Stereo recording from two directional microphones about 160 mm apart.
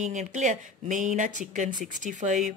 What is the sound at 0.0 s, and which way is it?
Speech, 50° right (ahead or behind).